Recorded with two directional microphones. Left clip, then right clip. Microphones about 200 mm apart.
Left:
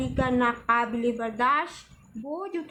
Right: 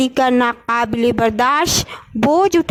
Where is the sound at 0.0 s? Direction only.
55° right (ahead or behind).